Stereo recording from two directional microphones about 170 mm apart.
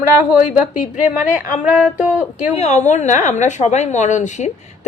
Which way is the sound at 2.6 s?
40° left (ahead or behind).